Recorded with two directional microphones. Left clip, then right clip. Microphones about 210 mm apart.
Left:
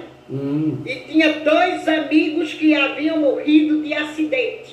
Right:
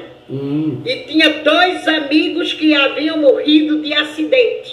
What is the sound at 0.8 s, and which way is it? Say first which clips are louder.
A man's voice: right 5 dB; 40° right (ahead or behind).